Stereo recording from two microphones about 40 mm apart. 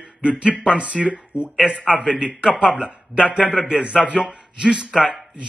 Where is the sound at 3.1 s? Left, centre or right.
Right.